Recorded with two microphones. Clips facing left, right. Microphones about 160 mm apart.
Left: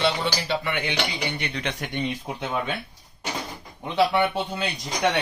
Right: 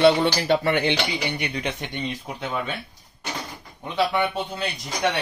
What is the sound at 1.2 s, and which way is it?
Speech, 15° right (ahead or behind).